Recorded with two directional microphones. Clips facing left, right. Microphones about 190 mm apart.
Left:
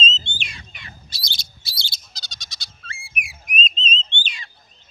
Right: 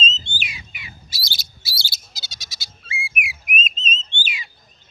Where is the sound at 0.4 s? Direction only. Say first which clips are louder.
Right 2 dB; 5° right (ahead or behind).